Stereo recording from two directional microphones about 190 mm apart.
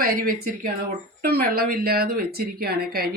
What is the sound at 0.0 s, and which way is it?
Speech, 50° right (ahead or behind).